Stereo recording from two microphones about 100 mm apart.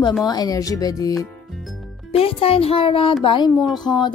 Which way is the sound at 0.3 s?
40° left (ahead or behind).